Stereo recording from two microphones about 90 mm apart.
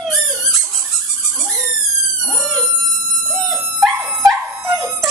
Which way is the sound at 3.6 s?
25° right (ahead or behind).